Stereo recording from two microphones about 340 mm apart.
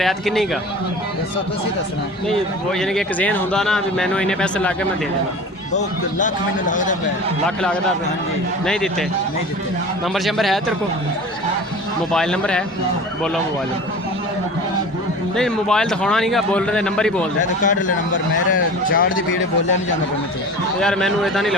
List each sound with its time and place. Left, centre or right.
0.0 s a man's voice: centre
2.2 s a man's voice: centre
5.7 s a man's voice: left
7.4 s a man's voice: centre
10.2 s a man's voice: centre
12.1 s a man's voice: centre
15.4 s a man's voice: centre
17.6 s a man's voice: left
18.9 s speech: left
20.8 s a man's voice: centre